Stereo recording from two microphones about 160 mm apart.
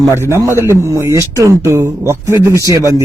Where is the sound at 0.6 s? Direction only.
20° right (ahead or behind).